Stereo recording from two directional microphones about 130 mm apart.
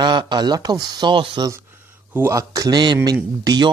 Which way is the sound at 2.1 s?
20° right (ahead or behind).